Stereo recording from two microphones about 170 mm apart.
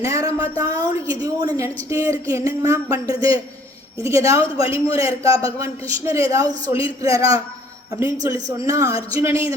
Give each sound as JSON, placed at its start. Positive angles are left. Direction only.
{"t": 0.0, "sound": "a woman's voice", "side_deg": -20}